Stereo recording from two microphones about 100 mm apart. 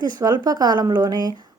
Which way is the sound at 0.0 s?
45° right (ahead or behind).